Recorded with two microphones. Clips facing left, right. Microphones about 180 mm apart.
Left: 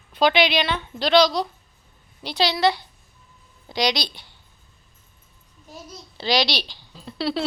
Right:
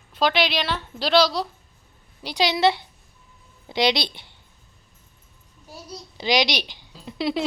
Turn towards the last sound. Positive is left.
turn(degrees=-15)  # may be behind; listen again after turning